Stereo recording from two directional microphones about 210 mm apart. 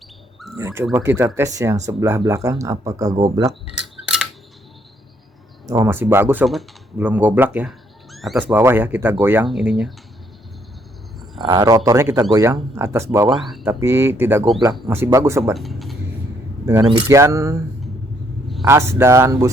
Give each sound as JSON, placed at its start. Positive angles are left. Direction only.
{"t": 0.6, "sound": "speech", "side_deg": -10}
{"t": 4.0, "sound": "camera", "side_deg": -5}
{"t": 5.6, "sound": "speech", "side_deg": -15}
{"t": 11.4, "sound": "speech", "side_deg": -20}
{"t": 13.3, "sound": "speech", "side_deg": 0}
{"t": 13.8, "sound": "speech", "side_deg": -10}
{"t": 15.5, "sound": "a sound", "side_deg": 0}
{"t": 17.1, "sound": "speech", "side_deg": -15}
{"t": 18.6, "sound": "speech", "side_deg": -10}